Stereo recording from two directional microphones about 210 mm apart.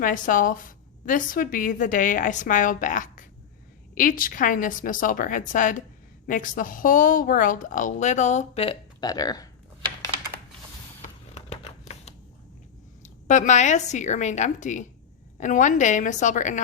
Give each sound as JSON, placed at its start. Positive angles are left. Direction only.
{"t": 0.0, "sound": "a woman's voice", "side_deg": 40}
{"t": 11.3, "sound": "typewriter", "side_deg": 30}
{"t": 13.0, "sound": "a woman's voice", "side_deg": 35}